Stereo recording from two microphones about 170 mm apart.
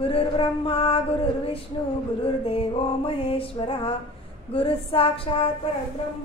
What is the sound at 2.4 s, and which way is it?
Music, 35° left (ahead or behind).